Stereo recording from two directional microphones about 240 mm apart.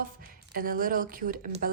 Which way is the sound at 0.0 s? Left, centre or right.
Right.